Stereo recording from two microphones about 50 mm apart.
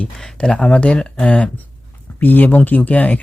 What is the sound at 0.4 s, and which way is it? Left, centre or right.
Speech, centre.